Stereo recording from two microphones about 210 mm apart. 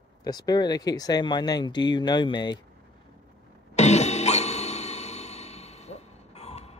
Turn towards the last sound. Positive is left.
turn(degrees=30)  # may be behind; listen again after turning